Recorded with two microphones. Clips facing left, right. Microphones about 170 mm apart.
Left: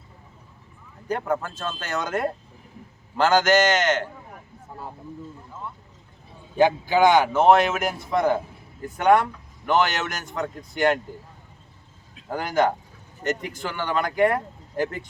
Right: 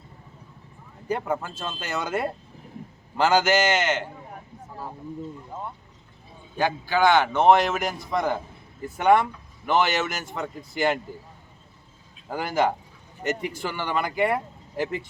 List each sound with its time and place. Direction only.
1.0 s speech: 10° right (ahead or behind)
6.6 s a man's voice: 20° left (ahead or behind)
7.3 s speech: centre (ahead or behind)
12.3 s speech: 5° right (ahead or behind)